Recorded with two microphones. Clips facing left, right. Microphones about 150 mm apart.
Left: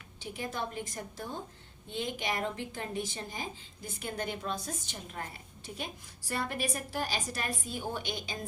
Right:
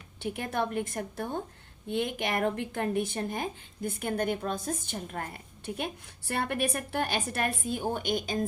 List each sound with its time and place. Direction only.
0.2 s a woman's voice: 60° right (ahead or behind)